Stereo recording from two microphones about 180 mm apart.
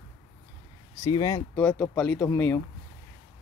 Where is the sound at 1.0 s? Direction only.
20° left (ahead or behind).